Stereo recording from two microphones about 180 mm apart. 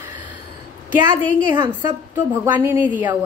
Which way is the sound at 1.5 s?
45° left (ahead or behind).